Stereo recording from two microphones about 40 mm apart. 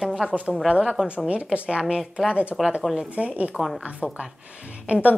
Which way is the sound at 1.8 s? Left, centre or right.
Centre.